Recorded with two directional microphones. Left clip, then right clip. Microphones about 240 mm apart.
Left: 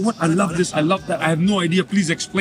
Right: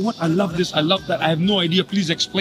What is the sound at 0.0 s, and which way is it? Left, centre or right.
A man's voice, centre.